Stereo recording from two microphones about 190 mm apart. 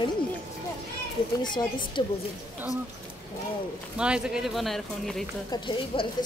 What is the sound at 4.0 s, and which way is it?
Speech, 5° right (ahead or behind).